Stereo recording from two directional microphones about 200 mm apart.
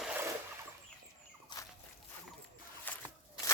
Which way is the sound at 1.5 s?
20° left (ahead or behind).